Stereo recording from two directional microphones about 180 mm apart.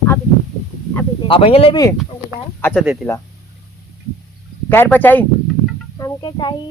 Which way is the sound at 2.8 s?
5° right (ahead or behind).